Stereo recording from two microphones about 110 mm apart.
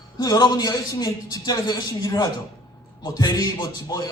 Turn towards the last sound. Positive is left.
turn(degrees=40)  # may be behind; listen again after turning